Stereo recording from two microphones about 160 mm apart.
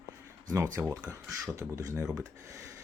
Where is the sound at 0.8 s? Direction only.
15° right (ahead or behind).